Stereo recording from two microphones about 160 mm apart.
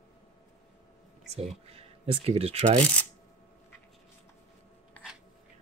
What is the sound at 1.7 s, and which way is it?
Speech, 40° right (ahead or behind).